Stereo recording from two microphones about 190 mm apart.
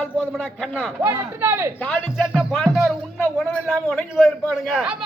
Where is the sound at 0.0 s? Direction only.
5° left (ahead or behind).